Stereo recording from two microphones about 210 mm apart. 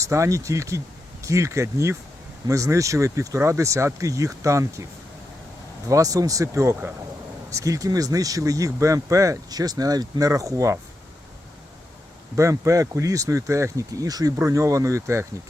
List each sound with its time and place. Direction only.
0.0 s speech: 15° right (ahead or behind)
5.9 s speech: 15° right (ahead or behind)
12.4 s speech: 15° right (ahead or behind)